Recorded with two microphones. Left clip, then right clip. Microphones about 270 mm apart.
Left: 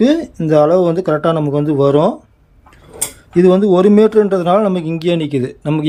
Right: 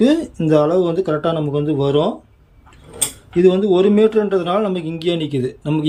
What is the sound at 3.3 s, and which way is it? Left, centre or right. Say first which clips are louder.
A man's voice: left 3 dB; centre.